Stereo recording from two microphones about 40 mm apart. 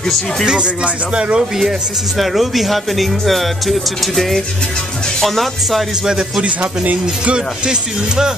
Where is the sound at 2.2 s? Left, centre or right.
Centre.